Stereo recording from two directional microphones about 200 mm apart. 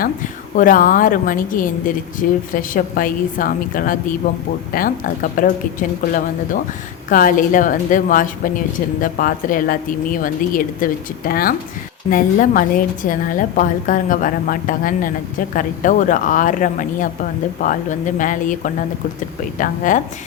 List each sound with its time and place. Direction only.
0.0 s a woman's voice: 40° left (ahead or behind)
7.1 s a woman's voice: 45° left (ahead or behind)